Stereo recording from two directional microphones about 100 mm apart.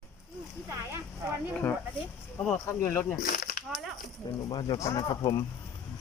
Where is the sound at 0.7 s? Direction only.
30° right (ahead or behind).